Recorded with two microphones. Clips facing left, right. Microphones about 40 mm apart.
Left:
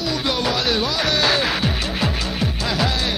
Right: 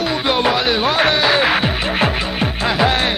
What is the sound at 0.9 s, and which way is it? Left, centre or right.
Music, right.